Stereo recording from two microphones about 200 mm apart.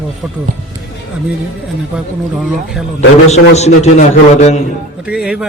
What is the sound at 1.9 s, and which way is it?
Speech, 5° right (ahead or behind).